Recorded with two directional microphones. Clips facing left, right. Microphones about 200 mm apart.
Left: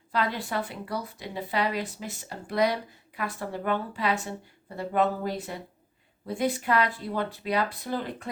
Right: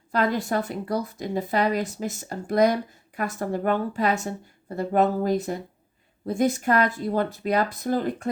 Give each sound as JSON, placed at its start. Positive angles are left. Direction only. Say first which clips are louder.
{"t": 0.1, "sound": "speech", "louder": "right 5 dB", "side_deg": -45}